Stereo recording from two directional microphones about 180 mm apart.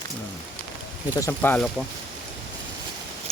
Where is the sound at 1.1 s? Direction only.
15° left (ahead or behind).